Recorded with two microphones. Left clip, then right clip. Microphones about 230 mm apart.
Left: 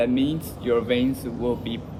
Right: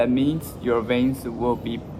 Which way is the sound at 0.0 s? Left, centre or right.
Centre.